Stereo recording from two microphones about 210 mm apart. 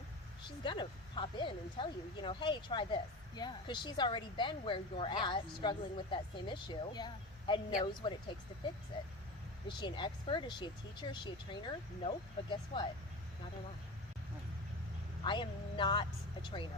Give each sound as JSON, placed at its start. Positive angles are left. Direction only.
{"t": 0.4, "sound": "speech", "side_deg": 25}
{"t": 9.6, "sound": "speech", "side_deg": 20}
{"t": 15.2, "sound": "speech", "side_deg": 20}